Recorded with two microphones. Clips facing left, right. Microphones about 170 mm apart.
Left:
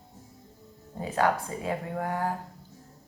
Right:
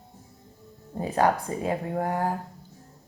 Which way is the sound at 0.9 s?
40° right (ahead or behind).